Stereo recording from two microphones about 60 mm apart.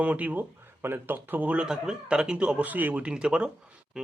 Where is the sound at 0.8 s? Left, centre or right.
Right.